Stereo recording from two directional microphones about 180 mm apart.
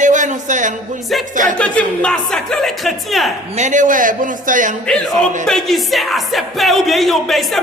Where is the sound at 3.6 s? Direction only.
45° right (ahead or behind).